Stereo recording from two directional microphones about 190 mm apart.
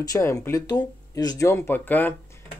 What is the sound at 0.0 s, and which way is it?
Speech, 15° left (ahead or behind).